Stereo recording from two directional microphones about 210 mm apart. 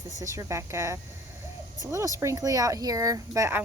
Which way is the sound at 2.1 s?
15° right (ahead or behind).